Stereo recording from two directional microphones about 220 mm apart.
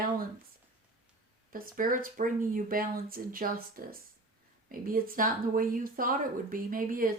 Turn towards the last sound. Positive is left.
turn(degrees=-40)  # may be behind; listen again after turning